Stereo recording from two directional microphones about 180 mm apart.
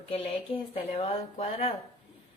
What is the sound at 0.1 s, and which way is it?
Speech, 35° left (ahead or behind).